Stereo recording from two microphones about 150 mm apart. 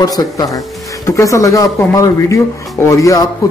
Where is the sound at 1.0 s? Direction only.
20° left (ahead or behind).